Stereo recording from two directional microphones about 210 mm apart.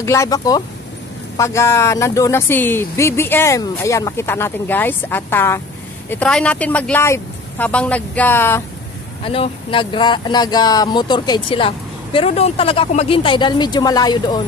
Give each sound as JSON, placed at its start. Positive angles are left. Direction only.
{"t": 0.0, "sound": "speech", "side_deg": 15}
{"t": 9.2, "sound": "speech", "side_deg": 25}